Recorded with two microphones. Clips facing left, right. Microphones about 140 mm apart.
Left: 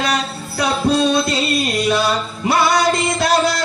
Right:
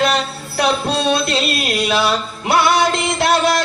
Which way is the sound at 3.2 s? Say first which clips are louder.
Right 2 dB; 55° right (ahead or behind).